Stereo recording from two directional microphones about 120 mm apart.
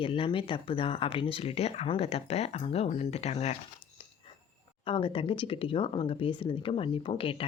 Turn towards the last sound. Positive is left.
turn(degrees=50)  # may be behind; listen again after turning